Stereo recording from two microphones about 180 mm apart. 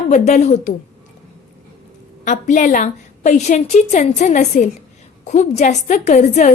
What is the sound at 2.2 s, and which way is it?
A woman's voice, 45° left (ahead or behind).